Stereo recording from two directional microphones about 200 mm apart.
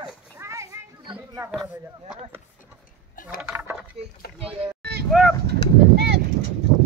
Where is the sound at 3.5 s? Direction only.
15° right (ahead or behind).